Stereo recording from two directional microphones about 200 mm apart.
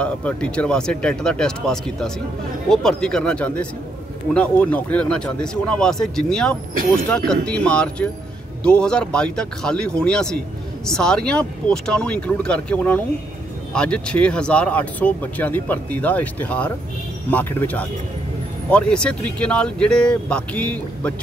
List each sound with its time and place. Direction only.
0.0 s speech: 5° left (ahead or behind)
6.7 s speech: 45° right (ahead or behind)
7.4 s speech: 5° left (ahead or behind)